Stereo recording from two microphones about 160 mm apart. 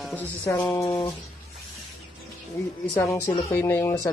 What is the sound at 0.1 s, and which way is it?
Speech, 10° left (ahead or behind).